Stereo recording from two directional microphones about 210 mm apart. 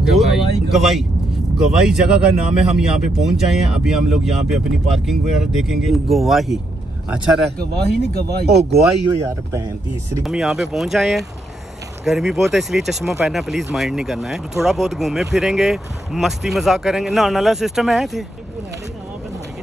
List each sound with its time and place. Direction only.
0.0 s vehicle: centre (ahead or behind)
1.6 s speech: 5° right (ahead or behind)
7.5 s speech: 50° right (ahead or behind)
10.2 s speech: centre (ahead or behind)